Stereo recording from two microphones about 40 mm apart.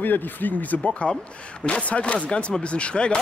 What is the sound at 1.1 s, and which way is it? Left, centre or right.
Speech, left.